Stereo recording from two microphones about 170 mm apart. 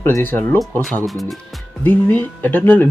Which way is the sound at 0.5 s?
Centre (ahead or behind).